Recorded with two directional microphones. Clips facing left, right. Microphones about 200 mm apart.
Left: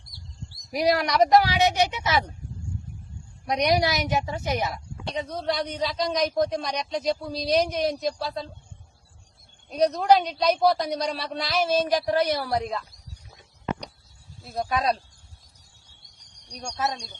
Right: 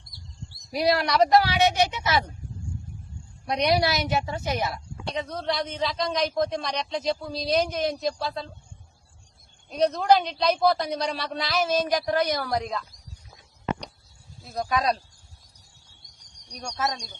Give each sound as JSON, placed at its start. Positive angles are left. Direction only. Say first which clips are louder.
{"t": 0.8, "sound": "a woman's voice", "louder": "even", "side_deg": 15}
{"t": 3.5, "sound": "a woman's voice", "louder": "even", "side_deg": 15}
{"t": 5.2, "sound": "a man's voice", "louder": "left 2 dB", "side_deg": 5}
{"t": 9.6, "sound": "a man's voice", "louder": "left 1 dB", "side_deg": 0}
{"t": 14.4, "sound": "a man's voice", "louder": "even", "side_deg": 5}